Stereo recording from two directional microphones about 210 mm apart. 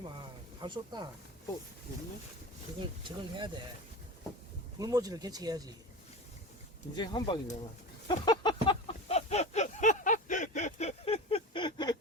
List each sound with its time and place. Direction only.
0.6 s speech: 20° right (ahead or behind)
3.0 s speech: 25° right (ahead or behind)
4.8 s speech: 15° right (ahead or behind)
6.9 s speech: 20° left (ahead or behind)
8.0 s a sound: 20° left (ahead or behind)